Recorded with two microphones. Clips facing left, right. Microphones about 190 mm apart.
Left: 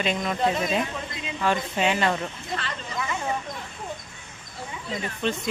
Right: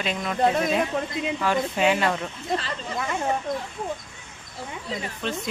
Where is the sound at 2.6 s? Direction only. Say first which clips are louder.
Right 2 dB; 45° right (ahead or behind).